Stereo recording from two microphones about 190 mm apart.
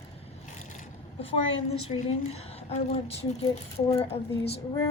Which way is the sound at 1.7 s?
35° left (ahead or behind).